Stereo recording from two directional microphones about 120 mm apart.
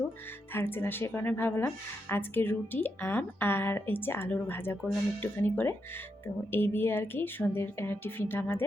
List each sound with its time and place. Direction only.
0.5 s a woman's voice: 20° left (ahead or behind)